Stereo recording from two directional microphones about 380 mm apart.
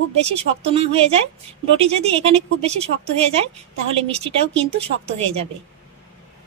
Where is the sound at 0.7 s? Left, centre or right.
Centre.